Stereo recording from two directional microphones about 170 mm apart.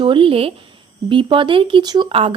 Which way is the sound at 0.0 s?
30° right (ahead or behind).